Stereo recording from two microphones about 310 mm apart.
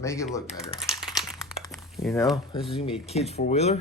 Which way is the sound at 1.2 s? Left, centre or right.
Centre.